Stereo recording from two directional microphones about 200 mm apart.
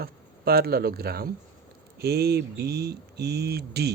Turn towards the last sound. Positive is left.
turn(degrees=-55)  # may be behind; listen again after turning